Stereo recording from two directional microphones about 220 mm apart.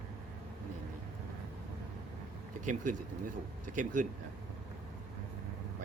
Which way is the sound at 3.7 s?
35° right (ahead or behind).